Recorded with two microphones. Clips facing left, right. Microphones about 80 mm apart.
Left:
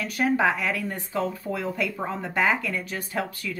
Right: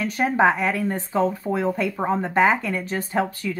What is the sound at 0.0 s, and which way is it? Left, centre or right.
Speech, right.